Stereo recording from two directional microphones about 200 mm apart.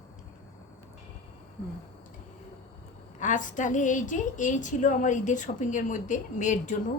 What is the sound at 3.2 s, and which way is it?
A woman's voice, 40° left (ahead or behind).